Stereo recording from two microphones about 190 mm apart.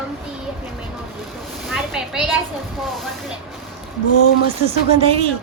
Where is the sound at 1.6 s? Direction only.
Centre (ahead or behind).